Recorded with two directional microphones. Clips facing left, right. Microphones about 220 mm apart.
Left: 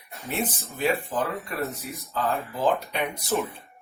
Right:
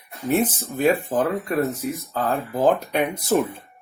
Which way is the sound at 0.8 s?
50° right (ahead or behind).